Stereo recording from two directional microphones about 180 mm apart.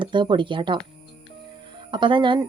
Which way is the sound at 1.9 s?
25° right (ahead or behind).